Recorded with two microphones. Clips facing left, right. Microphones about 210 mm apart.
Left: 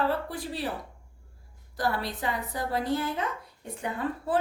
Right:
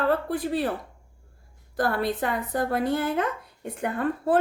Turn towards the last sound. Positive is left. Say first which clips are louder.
# right 5 dB
turn(degrees=-55)  # may be behind; listen again after turning